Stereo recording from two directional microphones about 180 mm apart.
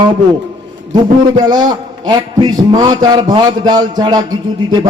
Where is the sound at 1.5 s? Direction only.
25° right (ahead or behind).